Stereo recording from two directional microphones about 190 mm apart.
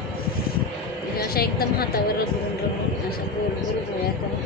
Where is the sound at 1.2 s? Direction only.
50° left (ahead or behind).